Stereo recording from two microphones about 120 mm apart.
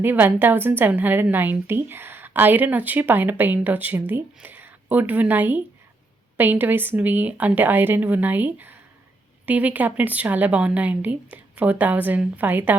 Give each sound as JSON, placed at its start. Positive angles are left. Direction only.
{"t": 0.0, "sound": "a woman's voice", "side_deg": -15}